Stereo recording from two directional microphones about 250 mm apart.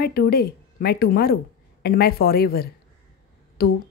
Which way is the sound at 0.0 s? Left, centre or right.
Left.